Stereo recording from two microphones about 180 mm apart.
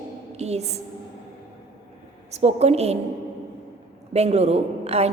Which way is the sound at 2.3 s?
35° right (ahead or behind).